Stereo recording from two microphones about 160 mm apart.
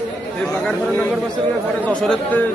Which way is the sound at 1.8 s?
5° left (ahead or behind).